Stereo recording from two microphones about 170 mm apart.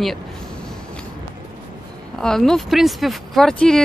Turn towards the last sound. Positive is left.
turn(degrees=5)  # may be behind; listen again after turning